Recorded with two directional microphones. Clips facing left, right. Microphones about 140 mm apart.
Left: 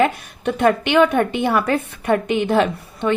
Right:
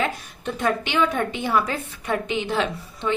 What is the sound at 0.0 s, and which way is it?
A woman's voice, 65° left (ahead or behind).